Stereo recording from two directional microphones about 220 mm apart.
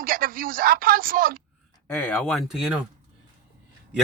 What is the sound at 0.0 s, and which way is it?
Speech, 40° right (ahead or behind).